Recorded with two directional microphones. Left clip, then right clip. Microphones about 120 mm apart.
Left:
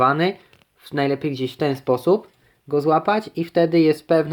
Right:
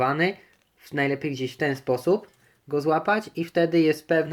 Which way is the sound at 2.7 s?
30° left (ahead or behind).